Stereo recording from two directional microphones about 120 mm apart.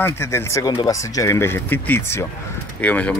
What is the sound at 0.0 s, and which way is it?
Speech, 20° left (ahead or behind).